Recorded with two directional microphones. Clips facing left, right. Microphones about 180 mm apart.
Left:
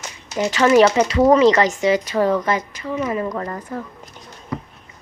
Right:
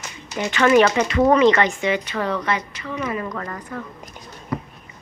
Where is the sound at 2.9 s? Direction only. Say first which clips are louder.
Left 4 dB; 30° left (ahead or behind).